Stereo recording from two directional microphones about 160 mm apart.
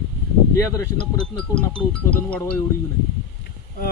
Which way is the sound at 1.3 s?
5° left (ahead or behind).